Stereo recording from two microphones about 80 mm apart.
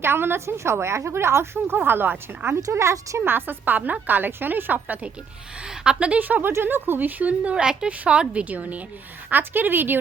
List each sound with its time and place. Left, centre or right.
0.0 s a woman's voice: right
2.6 s a woman's voice: right
3.2 s a woman's voice: right